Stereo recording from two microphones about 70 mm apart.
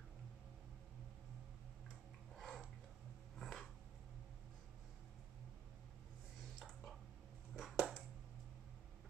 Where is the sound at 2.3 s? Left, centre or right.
Centre.